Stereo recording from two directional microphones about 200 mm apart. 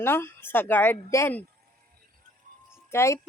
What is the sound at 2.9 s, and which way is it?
Speech, 15° left (ahead or behind).